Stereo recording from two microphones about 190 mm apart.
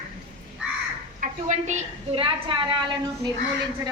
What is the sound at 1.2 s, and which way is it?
A woman's voice, 40° right (ahead or behind).